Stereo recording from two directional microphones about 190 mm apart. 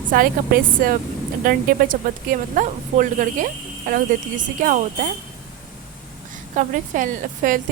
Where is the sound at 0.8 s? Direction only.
50° right (ahead or behind).